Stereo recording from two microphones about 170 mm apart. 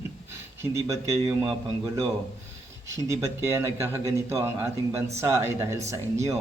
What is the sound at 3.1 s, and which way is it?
Speech, 15° right (ahead or behind).